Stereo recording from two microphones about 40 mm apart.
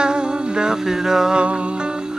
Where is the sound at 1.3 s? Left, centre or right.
Right.